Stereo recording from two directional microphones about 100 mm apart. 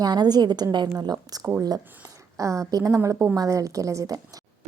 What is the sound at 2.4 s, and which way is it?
A woman's voice, 30° right (ahead or behind).